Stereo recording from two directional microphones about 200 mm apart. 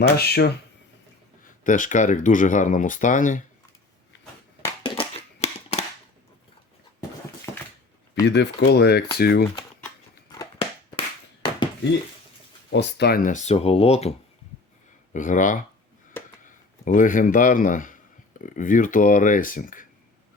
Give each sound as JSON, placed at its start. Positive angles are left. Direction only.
{"t": 0.2, "sound": "speech", "side_deg": 50}
{"t": 1.6, "sound": "speech", "side_deg": 40}
{"t": 4.6, "sound": "a sound", "side_deg": 25}
{"t": 8.3, "sound": "speech", "side_deg": 55}
{"t": 10.3, "sound": "a sound", "side_deg": 25}
{"t": 12.7, "sound": "speech", "side_deg": 55}
{"t": 16.8, "sound": "speech", "side_deg": 40}